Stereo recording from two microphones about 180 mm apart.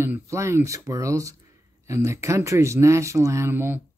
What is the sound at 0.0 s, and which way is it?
Speech, 15° right (ahead or behind).